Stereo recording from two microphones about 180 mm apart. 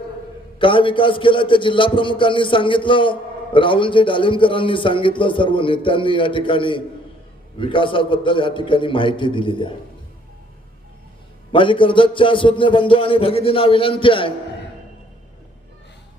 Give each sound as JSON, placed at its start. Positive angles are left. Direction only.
{"t": 0.6, "sound": "a man's voice", "side_deg": 30}
{"t": 11.5, "sound": "a man's voice", "side_deg": 30}